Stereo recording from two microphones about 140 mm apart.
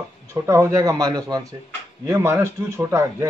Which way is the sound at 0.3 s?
20° right (ahead or behind).